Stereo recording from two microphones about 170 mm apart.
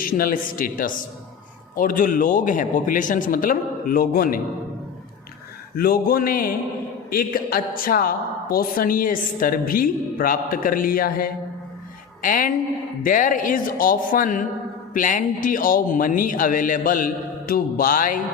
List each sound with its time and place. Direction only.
0.0 s a woman's voice: 55° left (ahead or behind)
5.7 s a woman's voice: 60° left (ahead or behind)